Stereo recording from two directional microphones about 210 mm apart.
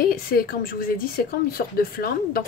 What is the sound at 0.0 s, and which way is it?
Speech, 45° left (ahead or behind).